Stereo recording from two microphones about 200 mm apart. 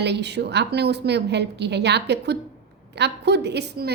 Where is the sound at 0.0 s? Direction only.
60° right (ahead or behind).